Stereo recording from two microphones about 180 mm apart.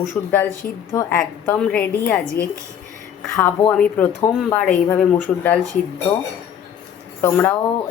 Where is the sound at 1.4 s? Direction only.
10° left (ahead or behind).